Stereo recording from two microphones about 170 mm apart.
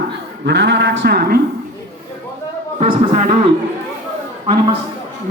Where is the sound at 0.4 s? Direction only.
90° right; by 1.4 s 65° right (ahead or behind).